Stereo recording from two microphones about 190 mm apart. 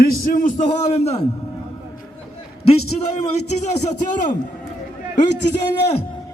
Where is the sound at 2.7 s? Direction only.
35° left (ahead or behind).